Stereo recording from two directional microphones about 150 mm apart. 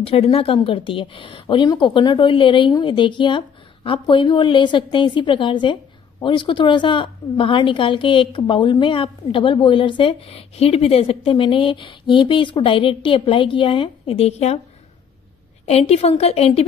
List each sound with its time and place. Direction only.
0.0 s a woman's voice: 40° left (ahead or behind)
15.6 s a woman's voice: 45° left (ahead or behind)